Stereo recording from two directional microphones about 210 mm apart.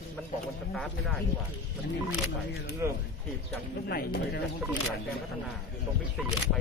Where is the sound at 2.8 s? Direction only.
10° right (ahead or behind).